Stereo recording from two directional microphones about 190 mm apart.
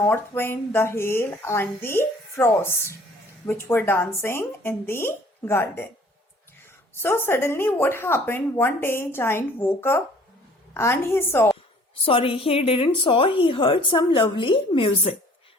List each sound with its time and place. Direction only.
0.0 s a woman's voice: 15° left (ahead or behind)
7.0 s a woman's voice: 10° left (ahead or behind)
12.0 s a woman's voice: 30° left (ahead or behind)